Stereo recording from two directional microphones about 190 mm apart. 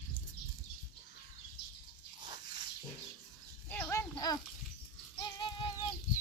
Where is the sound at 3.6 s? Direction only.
10° left (ahead or behind); by 5.7 s 25° left (ahead or behind).